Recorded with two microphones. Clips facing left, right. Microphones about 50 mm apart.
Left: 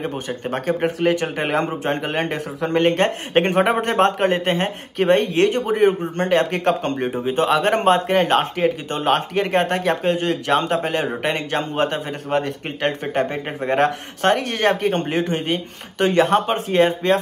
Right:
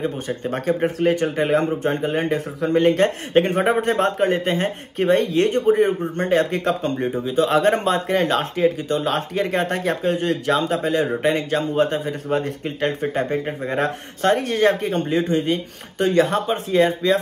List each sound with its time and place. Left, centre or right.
0.4 s a man's voice: left